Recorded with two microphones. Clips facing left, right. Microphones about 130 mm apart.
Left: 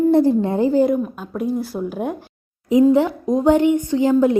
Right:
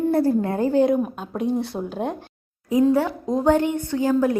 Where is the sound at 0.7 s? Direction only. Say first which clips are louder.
Left 2 dB; 5° left (ahead or behind).